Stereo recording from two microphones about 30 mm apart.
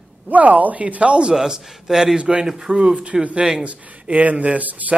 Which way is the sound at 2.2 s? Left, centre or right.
Right.